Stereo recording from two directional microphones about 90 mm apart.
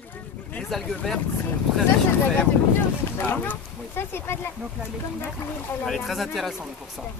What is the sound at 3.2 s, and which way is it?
Speech, 20° left (ahead or behind).